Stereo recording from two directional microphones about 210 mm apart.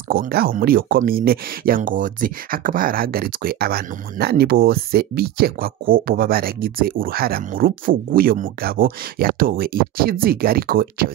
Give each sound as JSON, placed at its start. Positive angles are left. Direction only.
{"t": 0.1, "sound": "speech", "side_deg": -45}